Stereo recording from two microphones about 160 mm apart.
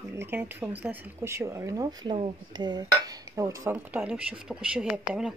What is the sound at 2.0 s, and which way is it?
Dishes, 30° right (ahead or behind).